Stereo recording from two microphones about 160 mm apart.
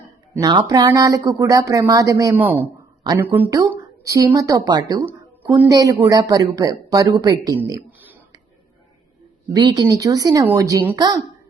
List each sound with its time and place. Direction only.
0.4 s speech: 30° right (ahead or behind)
7.9 s a sound: 10° right (ahead or behind)
9.5 s speech: 25° right (ahead or behind)